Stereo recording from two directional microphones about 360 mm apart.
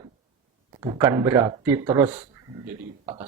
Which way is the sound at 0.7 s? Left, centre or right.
Centre.